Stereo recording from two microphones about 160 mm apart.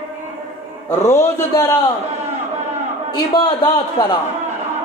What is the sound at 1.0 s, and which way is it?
Speech, 15° left (ahead or behind).